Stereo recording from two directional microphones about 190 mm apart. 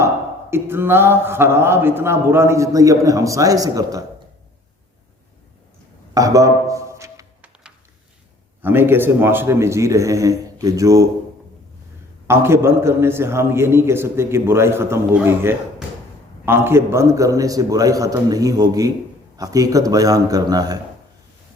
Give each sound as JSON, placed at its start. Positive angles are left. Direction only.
{"t": 0.5, "sound": "a man's voice", "side_deg": -10}
{"t": 6.1, "sound": "a sound", "side_deg": -15}
{"t": 8.6, "sound": "a man's voice", "side_deg": -10}
{"t": 12.3, "sound": "a man's voice", "side_deg": -15}